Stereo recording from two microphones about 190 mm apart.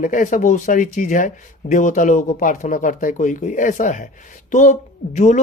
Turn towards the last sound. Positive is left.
turn(degrees=40)  # may be behind; listen again after turning